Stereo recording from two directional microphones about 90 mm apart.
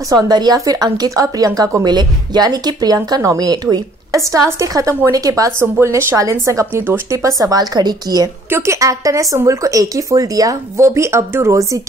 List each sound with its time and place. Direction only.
0.1 s a woman's voice: 45° right (ahead or behind)
1.9 s a woman's voice: 50° right (ahead or behind)
5.6 s speech: 30° right (ahead or behind); by 8.3 s 45° right (ahead or behind)
8.5 s a woman's voice: 25° right (ahead or behind)
8.7 s speech: 40° right (ahead or behind)